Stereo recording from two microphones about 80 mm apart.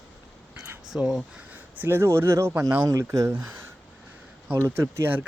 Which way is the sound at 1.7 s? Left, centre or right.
Right.